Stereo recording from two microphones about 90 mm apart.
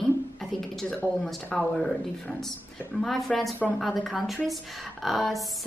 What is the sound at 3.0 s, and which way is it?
A child's voice, 5° left (ahead or behind).